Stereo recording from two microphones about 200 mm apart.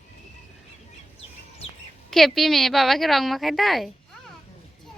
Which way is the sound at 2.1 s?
Centre (ahead or behind).